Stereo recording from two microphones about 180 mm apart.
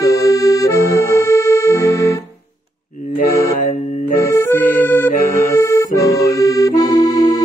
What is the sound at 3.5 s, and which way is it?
Music, 50° left (ahead or behind).